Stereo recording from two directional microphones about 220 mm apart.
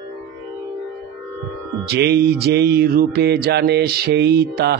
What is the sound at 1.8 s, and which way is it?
Music, 45° right (ahead or behind).